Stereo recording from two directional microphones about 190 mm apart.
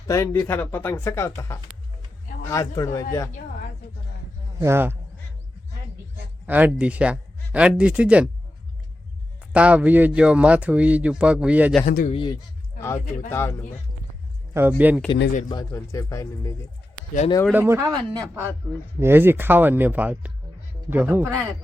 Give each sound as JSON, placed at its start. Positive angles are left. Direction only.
{"t": 0.1, "sound": "speech", "side_deg": 15}
{"t": 4.6, "sound": "speech", "side_deg": -10}
{"t": 6.4, "sound": "speech", "side_deg": -10}
{"t": 9.5, "sound": "speech", "side_deg": -5}
{"t": 11.9, "sound": "speech", "side_deg": 45}
{"t": 12.1, "sound": "speech", "side_deg": 25}
{"t": 13.3, "sound": "speech", "side_deg": 15}
{"t": 14.5, "sound": "speech", "side_deg": -10}
{"t": 15.4, "sound": "speech", "side_deg": 20}
{"t": 17.5, "sound": "speech", "side_deg": -10}